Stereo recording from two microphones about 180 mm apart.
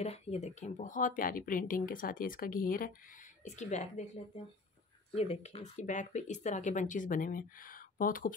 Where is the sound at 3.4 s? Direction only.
40° left (ahead or behind).